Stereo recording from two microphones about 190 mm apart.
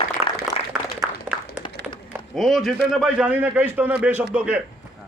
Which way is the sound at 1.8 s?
5° right (ahead or behind).